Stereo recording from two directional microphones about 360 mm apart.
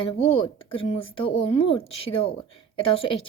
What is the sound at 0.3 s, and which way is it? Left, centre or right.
Speech, centre.